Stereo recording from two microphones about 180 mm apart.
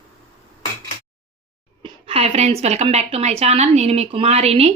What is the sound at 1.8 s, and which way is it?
Speech, 35° right (ahead or behind).